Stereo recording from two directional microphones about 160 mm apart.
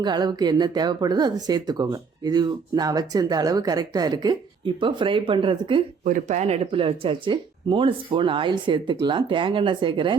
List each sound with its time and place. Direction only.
0.0 s speech: 25° right (ahead or behind)
6.1 s speech: 50° right (ahead or behind); by 10.2 s 30° right (ahead or behind)